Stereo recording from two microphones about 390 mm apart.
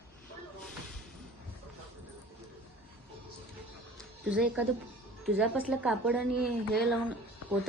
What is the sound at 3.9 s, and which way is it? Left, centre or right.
Music, centre.